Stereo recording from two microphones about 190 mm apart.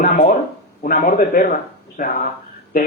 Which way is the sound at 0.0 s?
45° left (ahead or behind).